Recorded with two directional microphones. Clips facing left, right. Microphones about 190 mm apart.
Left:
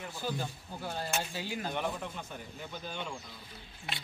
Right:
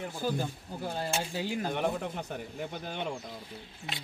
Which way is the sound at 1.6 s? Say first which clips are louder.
Right 4 dB; 55° right (ahead or behind).